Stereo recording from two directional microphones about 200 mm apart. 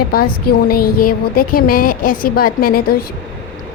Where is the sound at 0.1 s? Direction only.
50° left (ahead or behind).